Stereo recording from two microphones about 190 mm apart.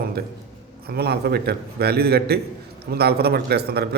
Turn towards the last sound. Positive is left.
turn(degrees=-55)  # may be behind; listen again after turning